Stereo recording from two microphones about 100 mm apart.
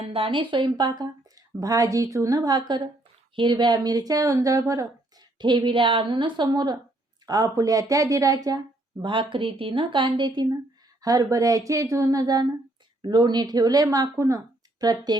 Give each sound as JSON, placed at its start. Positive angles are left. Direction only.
{"t": 0.1, "sound": "a woman's voice", "side_deg": -60}
{"t": 5.4, "sound": "a woman's voice", "side_deg": -50}
{"t": 9.0, "sound": "a woman's voice", "side_deg": -55}